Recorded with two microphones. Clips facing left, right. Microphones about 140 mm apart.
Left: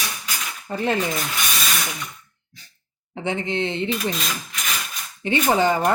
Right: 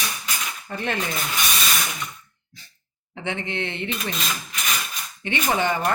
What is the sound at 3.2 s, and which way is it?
Speech, 35° left (ahead or behind).